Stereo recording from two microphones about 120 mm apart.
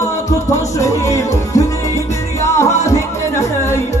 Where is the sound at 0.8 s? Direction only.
25° left (ahead or behind).